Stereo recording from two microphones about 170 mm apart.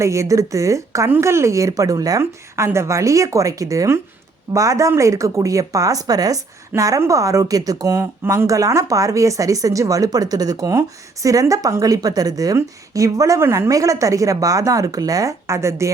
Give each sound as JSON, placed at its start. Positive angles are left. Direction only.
{"t": 0.0, "sound": "speech", "side_deg": -20}